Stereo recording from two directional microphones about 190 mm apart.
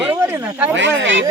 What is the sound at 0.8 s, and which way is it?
Speech, 80° right.